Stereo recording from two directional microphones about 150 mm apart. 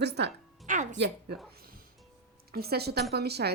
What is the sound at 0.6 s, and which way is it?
Music, 55° right (ahead or behind).